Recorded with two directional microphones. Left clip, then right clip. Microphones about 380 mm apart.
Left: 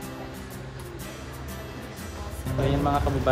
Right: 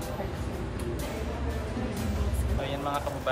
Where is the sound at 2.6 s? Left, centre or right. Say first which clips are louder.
Left 6 dB; centre.